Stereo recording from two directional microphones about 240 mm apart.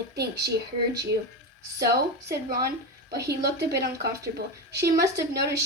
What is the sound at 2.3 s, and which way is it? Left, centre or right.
A woman's voice, right.